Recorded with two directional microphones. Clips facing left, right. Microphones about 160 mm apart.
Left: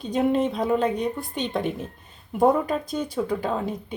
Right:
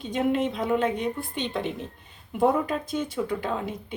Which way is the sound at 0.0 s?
35° left (ahead or behind).